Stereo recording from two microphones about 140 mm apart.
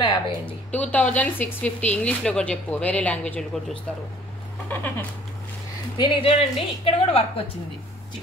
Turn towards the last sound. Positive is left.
turn(degrees=45)  # may be behind; listen again after turning